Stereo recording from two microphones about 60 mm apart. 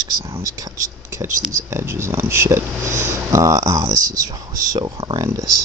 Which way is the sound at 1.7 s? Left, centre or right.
Right.